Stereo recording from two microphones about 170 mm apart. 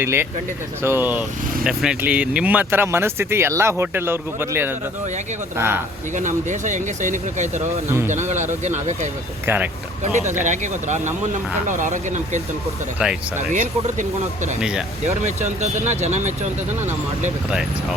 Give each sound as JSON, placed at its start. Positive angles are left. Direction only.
{"t": 0.0, "sound": "speech", "side_deg": -15}
{"t": 6.1, "sound": "speech", "side_deg": -45}
{"t": 7.9, "sound": "speech", "side_deg": -15}
{"t": 8.1, "sound": "speech", "side_deg": -45}
{"t": 9.5, "sound": "speech", "side_deg": -15}
{"t": 10.4, "sound": "speech", "side_deg": -45}
{"t": 13.0, "sound": "speech", "side_deg": -5}
{"t": 13.5, "sound": "speech", "side_deg": -45}
{"t": 14.6, "sound": "speech", "side_deg": -5}
{"t": 15.0, "sound": "speech", "side_deg": -45}